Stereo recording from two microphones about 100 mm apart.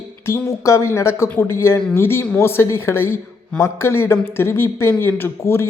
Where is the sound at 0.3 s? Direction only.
30° left (ahead or behind).